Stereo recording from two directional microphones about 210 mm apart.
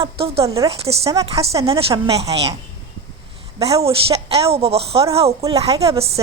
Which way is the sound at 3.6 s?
30° right (ahead or behind).